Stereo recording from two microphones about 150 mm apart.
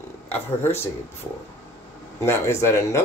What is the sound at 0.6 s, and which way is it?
Speech, 15° left (ahead or behind).